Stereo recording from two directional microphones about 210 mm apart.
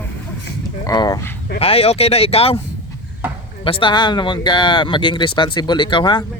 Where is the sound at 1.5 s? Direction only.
30° left (ahead or behind).